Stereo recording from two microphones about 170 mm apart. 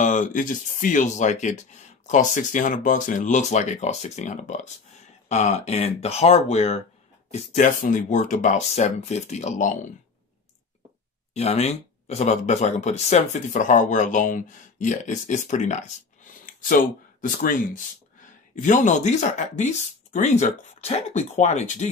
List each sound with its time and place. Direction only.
0.0 s speech: 50° left (ahead or behind)
11.3 s speech: 40° left (ahead or behind)